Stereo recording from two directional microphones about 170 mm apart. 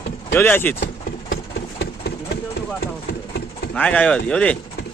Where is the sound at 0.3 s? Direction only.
10° left (ahead or behind).